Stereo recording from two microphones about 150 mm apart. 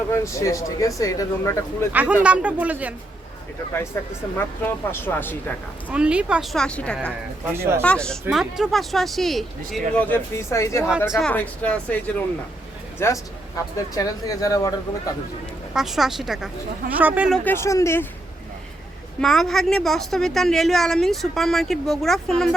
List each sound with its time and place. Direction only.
0.1 s speech: 20° left (ahead or behind)
1.9 s speech: 10° right (ahead or behind)
4.4 s speech: 15° left (ahead or behind)
5.9 s a woman's voice: 5° right (ahead or behind); by 10.9 s 20° left (ahead or behind)
11.1 s speech: 5° left (ahead or behind); by 15.1 s 20° left (ahead or behind)
15.7 s a woman's voice: centre (ahead or behind)
17.2 s a woman's voice: 5° left (ahead or behind)
17.5 s speech: 20° left (ahead or behind)
19.2 s a woman's voice: centre (ahead or behind)